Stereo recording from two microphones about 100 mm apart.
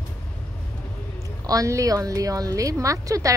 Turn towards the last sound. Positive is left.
turn(degrees=-35)  # may be behind; listen again after turning